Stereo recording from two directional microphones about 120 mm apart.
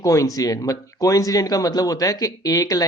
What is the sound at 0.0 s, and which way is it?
Speech, 30° left (ahead or behind).